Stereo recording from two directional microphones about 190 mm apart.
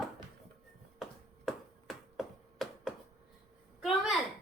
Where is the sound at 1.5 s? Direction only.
Centre (ahead or behind).